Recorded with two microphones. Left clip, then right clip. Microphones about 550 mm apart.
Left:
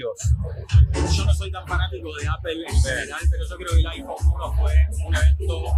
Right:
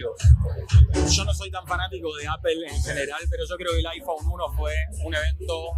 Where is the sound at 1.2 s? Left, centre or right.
Right.